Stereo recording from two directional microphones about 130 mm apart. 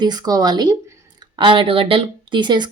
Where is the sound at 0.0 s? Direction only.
30° right (ahead or behind).